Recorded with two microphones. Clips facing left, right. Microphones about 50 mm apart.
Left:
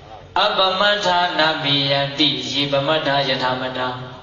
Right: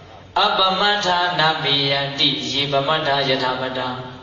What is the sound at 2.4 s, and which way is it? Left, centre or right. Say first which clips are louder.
Mantra: left 1 dB; right.